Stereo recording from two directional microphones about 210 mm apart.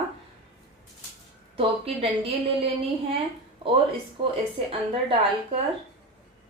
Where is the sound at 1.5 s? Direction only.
25° right (ahead or behind).